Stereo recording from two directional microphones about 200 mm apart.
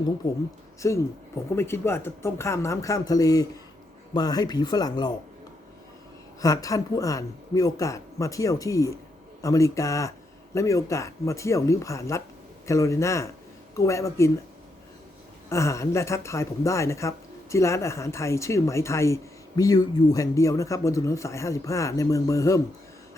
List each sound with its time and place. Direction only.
0.2 s speech: 20° left (ahead or behind)
6.4 s speech: 15° left (ahead or behind)
15.4 s speech: 15° left (ahead or behind)